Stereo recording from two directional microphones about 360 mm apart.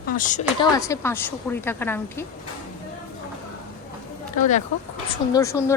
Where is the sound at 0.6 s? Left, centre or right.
Centre.